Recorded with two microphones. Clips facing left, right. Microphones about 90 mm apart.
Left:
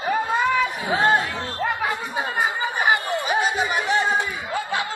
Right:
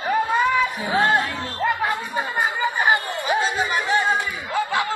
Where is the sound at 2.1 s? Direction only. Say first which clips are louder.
Even; 15° left (ahead or behind).